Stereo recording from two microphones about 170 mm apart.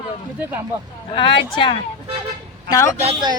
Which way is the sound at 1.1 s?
30° left (ahead or behind).